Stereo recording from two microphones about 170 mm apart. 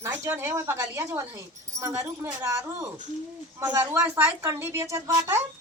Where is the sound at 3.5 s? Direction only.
15° right (ahead or behind).